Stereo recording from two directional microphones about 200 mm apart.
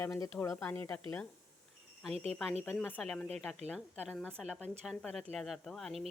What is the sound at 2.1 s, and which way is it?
Speech, 30° right (ahead or behind).